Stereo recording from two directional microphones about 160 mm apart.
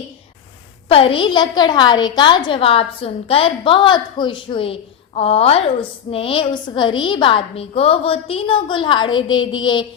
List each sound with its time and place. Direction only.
0.9 s a woman's voice: 35° left (ahead or behind)